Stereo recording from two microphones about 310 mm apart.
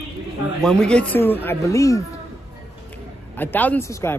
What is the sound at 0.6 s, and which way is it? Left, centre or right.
Speech, centre.